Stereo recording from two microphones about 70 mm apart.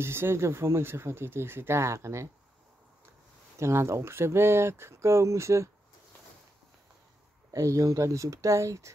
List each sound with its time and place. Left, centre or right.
0.0 s speech: right
3.5 s speech: right
7.5 s speech: right